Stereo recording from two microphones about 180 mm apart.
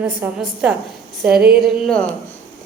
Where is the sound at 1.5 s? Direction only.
Centre (ahead or behind).